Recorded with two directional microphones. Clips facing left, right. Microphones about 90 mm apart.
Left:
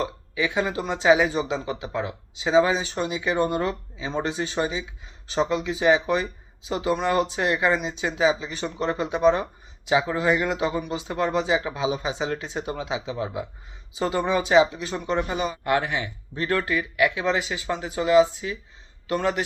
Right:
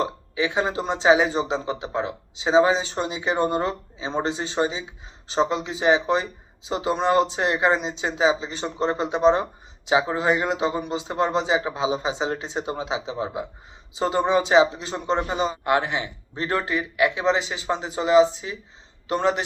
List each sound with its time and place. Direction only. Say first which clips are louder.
0.0 s a man's voice: right 2 dB; 25° right (ahead or behind)